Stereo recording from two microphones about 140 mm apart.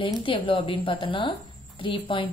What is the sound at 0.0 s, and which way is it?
A woman's voice, 40° left (ahead or behind).